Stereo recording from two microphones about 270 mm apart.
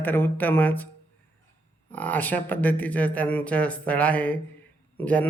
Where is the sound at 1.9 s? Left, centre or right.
Centre.